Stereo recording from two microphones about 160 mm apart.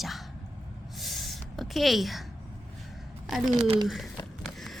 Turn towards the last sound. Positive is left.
turn(degrees=0)  # may be behind; listen again after turning